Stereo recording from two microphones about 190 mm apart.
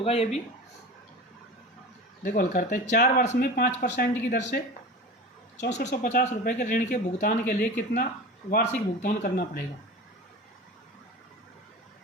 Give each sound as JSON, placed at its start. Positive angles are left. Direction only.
{"t": 0.0, "sound": "speech", "side_deg": 30}
{"t": 2.2, "sound": "speech", "side_deg": 45}
{"t": 4.3, "sound": "speech", "side_deg": 60}
{"t": 5.6, "sound": "speech", "side_deg": 40}